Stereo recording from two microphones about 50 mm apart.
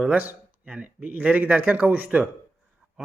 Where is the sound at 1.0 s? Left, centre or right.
Right.